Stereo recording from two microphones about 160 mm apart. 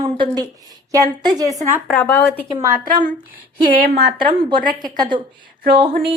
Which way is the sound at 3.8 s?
70° right (ahead or behind).